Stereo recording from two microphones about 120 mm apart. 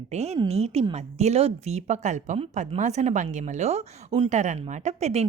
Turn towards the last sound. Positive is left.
turn(degrees=-65)  # may be behind; listen again after turning